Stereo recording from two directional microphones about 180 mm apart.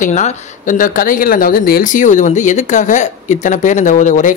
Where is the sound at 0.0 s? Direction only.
45° left (ahead or behind).